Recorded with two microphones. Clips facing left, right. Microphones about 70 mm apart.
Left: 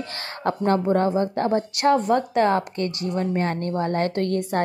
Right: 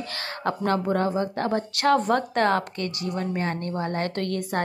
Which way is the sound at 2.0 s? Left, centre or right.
Centre.